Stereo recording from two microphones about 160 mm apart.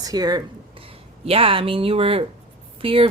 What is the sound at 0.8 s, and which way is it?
Speech, 35° right (ahead or behind).